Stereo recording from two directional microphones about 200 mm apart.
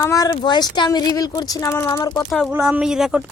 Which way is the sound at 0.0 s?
15° left (ahead or behind).